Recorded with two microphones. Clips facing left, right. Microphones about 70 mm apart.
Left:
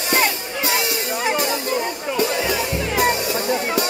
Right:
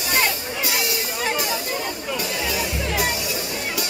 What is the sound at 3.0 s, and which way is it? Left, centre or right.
Music, left.